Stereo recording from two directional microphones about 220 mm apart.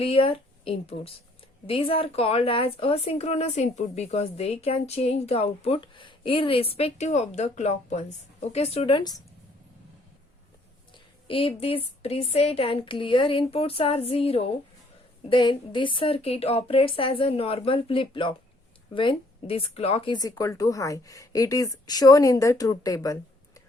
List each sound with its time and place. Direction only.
0.0 s speech: 25° left (ahead or behind)
10.9 s speech: 25° left (ahead or behind)